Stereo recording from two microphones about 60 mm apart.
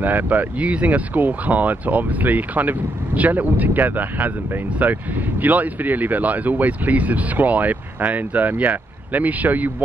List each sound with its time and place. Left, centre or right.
0.0 s speech: right